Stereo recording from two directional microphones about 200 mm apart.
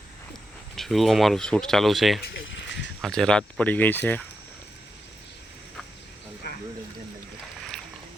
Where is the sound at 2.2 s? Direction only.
65° left (ahead or behind).